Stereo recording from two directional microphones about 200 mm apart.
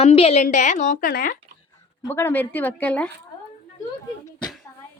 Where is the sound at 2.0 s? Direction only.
10° left (ahead or behind).